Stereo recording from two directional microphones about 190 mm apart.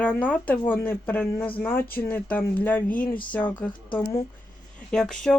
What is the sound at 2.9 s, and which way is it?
Speech, 45° left (ahead or behind).